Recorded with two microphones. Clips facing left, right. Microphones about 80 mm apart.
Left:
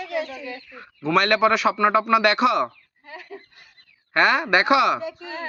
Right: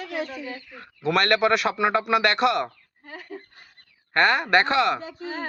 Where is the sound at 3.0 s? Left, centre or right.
Right.